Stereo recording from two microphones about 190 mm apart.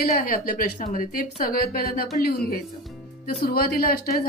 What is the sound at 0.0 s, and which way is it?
A woman's voice, 50° left (ahead or behind).